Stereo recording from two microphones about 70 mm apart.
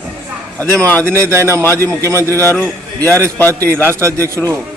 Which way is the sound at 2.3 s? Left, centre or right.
Right.